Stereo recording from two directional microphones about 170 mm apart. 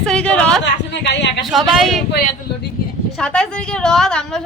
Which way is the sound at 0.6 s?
85° left.